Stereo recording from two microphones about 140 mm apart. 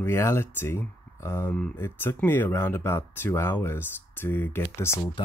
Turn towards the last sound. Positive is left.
turn(degrees=15)  # may be behind; listen again after turning